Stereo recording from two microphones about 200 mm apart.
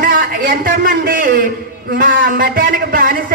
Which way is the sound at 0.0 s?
45° right (ahead or behind).